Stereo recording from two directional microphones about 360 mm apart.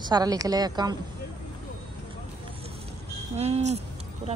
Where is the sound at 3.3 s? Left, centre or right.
Centre.